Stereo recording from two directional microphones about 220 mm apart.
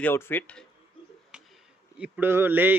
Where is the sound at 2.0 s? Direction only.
10° right (ahead or behind).